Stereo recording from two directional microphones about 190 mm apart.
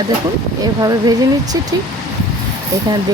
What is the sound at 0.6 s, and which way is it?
Speech, 20° right (ahead or behind).